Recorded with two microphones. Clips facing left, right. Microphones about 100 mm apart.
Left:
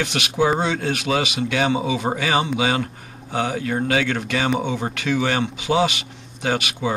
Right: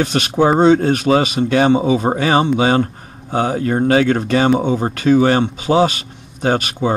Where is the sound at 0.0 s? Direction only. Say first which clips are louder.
Right 6 dB; 40° right (ahead or behind).